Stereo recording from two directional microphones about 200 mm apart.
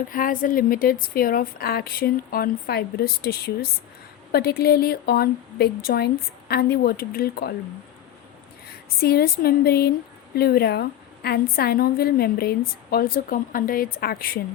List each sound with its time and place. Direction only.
0.1 s a woman's voice: 45° left (ahead or behind)
8.6 s a woman's voice: 50° left (ahead or behind)